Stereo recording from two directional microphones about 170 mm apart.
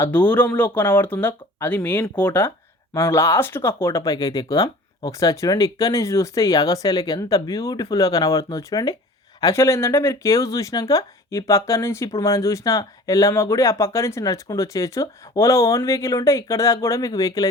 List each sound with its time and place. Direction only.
0.0 s speech: 10° left (ahead or behind)